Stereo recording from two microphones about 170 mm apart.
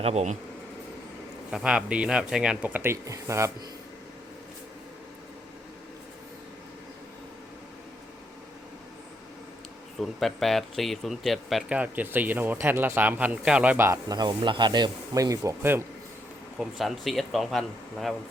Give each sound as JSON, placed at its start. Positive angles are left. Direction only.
{"t": 0.0, "sound": "speech", "side_deg": -40}
{"t": 1.5, "sound": "speech", "side_deg": -5}
{"t": 10.0, "sound": "speech", "side_deg": 0}
{"t": 16.6, "sound": "speech", "side_deg": 0}